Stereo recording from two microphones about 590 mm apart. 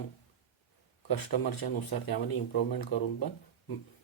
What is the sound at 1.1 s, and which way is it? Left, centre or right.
Speech, left.